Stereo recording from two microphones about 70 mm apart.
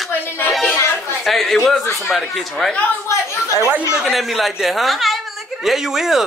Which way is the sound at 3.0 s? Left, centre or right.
Left.